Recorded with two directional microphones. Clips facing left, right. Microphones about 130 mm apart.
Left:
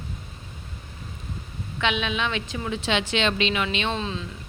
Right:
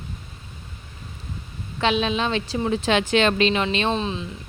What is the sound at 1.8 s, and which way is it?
A woman's voice, 35° right (ahead or behind).